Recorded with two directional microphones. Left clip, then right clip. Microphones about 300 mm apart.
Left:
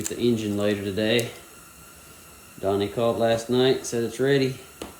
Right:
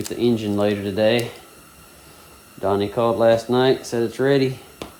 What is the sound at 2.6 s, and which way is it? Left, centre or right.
Speech, centre.